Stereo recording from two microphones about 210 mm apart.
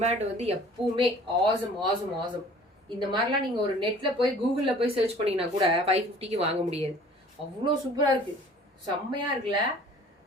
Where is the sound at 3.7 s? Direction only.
25° right (ahead or behind).